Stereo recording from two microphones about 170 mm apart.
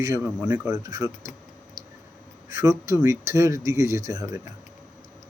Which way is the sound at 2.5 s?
20° right (ahead or behind).